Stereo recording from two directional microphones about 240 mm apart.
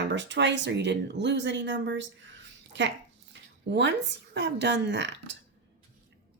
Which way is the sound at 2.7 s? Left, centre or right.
Right.